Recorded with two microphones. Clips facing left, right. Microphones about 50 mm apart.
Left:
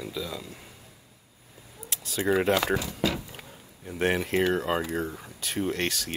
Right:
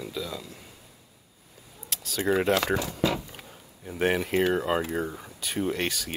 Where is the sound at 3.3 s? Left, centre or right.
Centre.